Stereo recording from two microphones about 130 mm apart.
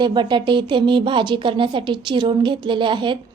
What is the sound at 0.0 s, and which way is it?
Speech, 35° right (ahead or behind).